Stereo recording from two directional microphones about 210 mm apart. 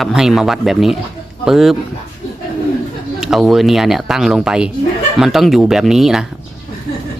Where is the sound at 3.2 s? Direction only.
Centre (ahead or behind).